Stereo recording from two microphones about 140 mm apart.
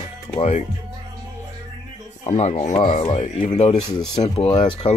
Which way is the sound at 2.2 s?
50° left (ahead or behind).